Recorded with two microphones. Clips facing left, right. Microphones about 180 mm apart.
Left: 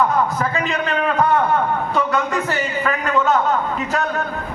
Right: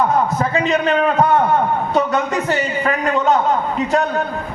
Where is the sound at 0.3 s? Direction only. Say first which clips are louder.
Right 4 dB; 25° right (ahead or behind).